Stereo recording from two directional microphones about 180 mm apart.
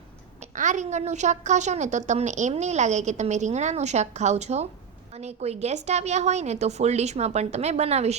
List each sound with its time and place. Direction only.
0.5 s a woman's voice: 45° right (ahead or behind)